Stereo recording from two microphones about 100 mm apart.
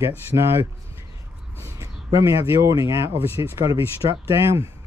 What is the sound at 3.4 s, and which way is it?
Speech, 40° right (ahead or behind).